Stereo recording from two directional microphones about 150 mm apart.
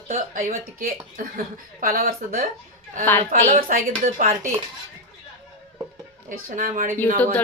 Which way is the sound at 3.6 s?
70° right (ahead or behind).